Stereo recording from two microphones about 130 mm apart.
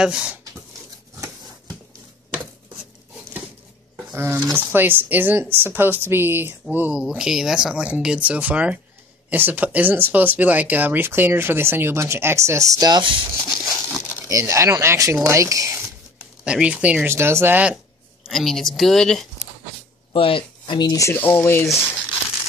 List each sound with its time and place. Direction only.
0.0 s speech: 10° right (ahead or behind)
4.1 s speech: 15° right (ahead or behind); by 13.1 s 35° right (ahead or behind)
13.4 s a sound: centre (ahead or behind)
14.3 s speech: 25° right (ahead or behind)
16.4 s speech: 10° right (ahead or behind)
18.2 s a woman's voice: centre (ahead or behind)
20.1 s speech: 45° left (ahead or behind)
21.1 s speech: 15° left (ahead or behind)